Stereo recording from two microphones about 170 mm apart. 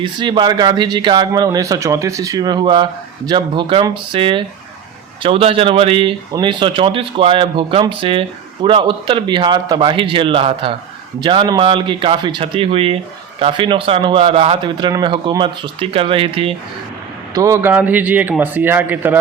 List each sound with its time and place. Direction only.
0.0 s a man's voice: 25° right (ahead or behind)
17.3 s a man's voice: 15° right (ahead or behind)